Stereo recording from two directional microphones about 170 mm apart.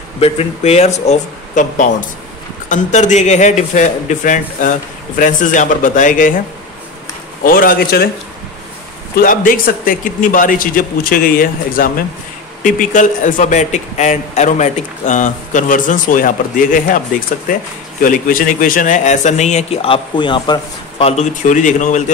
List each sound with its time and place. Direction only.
0.2 s a man's voice: 35° left (ahead or behind)
7.4 s a man's voice: 55° left (ahead or behind)
9.1 s a man's voice: 55° left (ahead or behind)
18.0 s a man's voice: 55° left (ahead or behind); by 21.1 s 25° left (ahead or behind)
21.2 s a man's voice: 50° left (ahead or behind)